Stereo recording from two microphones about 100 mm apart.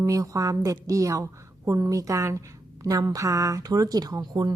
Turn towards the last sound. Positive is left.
turn(degrees=-40)  # may be behind; listen again after turning